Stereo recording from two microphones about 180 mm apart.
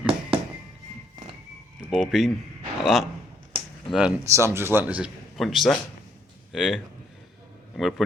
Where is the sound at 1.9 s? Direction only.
Centre (ahead or behind).